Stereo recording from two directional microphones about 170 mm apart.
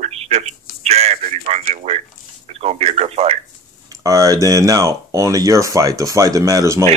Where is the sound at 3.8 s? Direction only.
20° right (ahead or behind).